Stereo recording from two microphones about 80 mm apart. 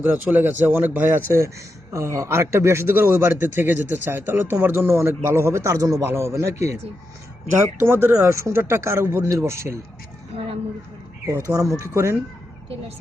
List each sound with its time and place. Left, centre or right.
0.0 s a man's voice: right
1.9 s a man's voice: right
11.3 s a man's voice: right